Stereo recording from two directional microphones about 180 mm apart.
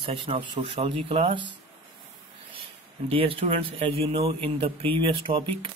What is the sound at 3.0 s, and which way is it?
Speech, 30° right (ahead or behind).